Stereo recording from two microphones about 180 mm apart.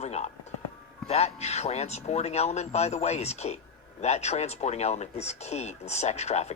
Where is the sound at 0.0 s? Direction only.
35° left (ahead or behind).